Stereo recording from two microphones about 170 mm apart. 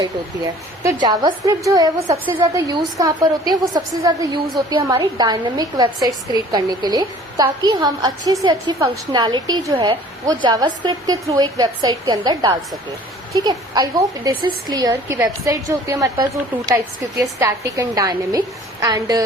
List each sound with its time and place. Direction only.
0.8 s a woman's voice: 20° right (ahead or behind)